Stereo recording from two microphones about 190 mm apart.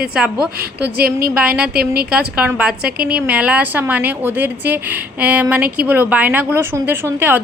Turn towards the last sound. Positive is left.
turn(degrees=-10)  # may be behind; listen again after turning